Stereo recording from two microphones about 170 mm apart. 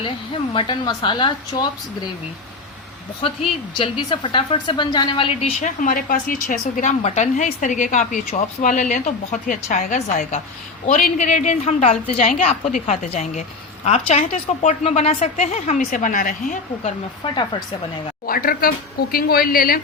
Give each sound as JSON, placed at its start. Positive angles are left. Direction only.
{"t": 0.5, "sound": "a woman's voice", "side_deg": 30}
{"t": 3.2, "sound": "a woman's voice", "side_deg": 35}
{"t": 17.2, "sound": "a woman's voice", "side_deg": 25}
{"t": 18.3, "sound": "a woman's voice", "side_deg": 60}